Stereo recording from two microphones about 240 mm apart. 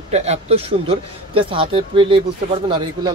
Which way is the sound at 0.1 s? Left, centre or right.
Right.